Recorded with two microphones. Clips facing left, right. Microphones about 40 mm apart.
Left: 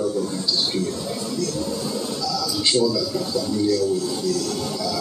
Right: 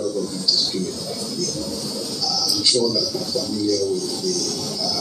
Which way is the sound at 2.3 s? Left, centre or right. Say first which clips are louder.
Right 1 dB; left.